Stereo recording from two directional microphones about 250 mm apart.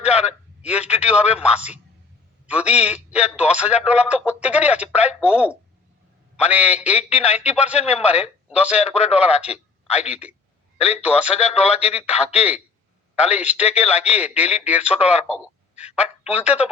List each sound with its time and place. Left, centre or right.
0.0 s a man's voice: centre
15.7 s a sound: left
16.3 s a man's voice: centre